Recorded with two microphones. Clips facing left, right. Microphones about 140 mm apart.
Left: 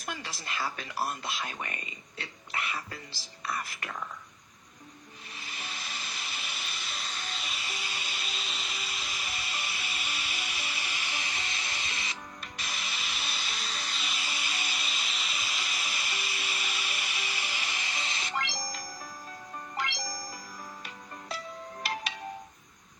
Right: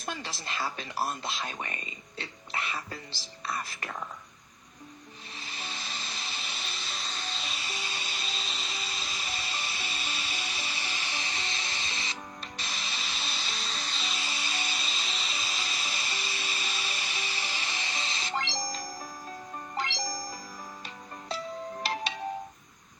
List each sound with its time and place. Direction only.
0.0 s speech: 30° right (ahead or behind)
5.3 s music: 30° right (ahead or behind)